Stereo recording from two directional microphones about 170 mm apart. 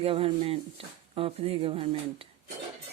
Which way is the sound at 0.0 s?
35° right (ahead or behind).